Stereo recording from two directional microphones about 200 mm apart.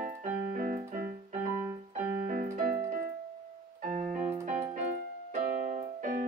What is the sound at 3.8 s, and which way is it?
Music, 40° right (ahead or behind).